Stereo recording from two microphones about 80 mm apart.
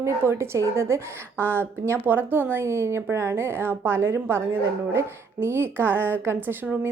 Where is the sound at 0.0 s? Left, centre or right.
Right.